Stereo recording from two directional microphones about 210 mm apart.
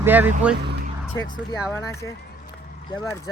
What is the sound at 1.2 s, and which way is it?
Speech, 15° left (ahead or behind).